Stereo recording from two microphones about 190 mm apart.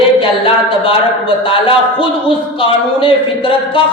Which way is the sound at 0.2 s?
30° left (ahead or behind).